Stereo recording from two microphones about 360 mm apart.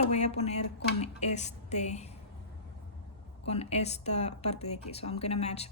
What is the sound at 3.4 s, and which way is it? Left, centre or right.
A woman's voice, centre.